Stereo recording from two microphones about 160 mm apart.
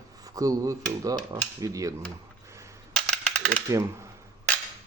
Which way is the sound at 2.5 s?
20° right (ahead or behind).